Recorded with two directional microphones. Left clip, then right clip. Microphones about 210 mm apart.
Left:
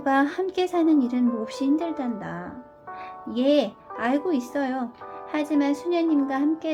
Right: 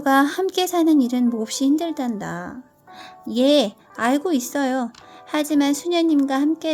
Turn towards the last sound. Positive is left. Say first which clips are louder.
# right 4 dB
turn(degrees=-55)  # may be behind; listen again after turning